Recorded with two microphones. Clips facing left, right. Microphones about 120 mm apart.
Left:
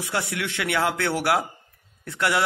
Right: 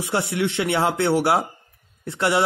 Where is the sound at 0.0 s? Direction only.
25° right (ahead or behind).